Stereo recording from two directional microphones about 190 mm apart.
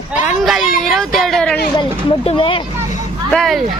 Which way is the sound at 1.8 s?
30° left (ahead or behind).